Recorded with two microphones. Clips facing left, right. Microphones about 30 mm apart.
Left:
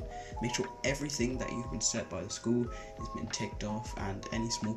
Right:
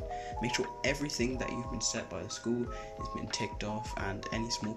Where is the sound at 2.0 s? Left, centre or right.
Centre.